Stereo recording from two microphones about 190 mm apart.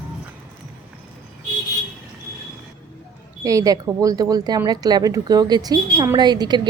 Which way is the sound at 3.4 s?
15° right (ahead or behind).